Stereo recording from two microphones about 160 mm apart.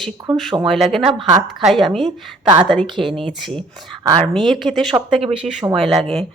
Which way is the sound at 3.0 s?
45° right (ahead or behind).